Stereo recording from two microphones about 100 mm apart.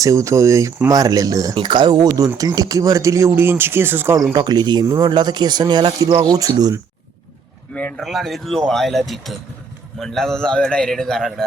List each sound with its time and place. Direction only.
0.0 s speech: 30° right (ahead or behind)
1.5 s speech: 50° right (ahead or behind); by 4.1 s 20° right (ahead or behind)
4.3 s speech: 45° right (ahead or behind)
7.7 s speech: 15° left (ahead or behind)
8.0 s a man's voice: centre (ahead or behind)